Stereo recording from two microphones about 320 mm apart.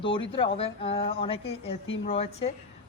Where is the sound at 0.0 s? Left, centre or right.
Centre.